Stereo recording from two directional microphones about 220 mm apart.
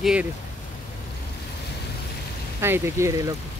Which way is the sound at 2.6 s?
10° right (ahead or behind).